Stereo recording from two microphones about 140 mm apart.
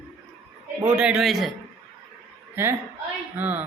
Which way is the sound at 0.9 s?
5° right (ahead or behind).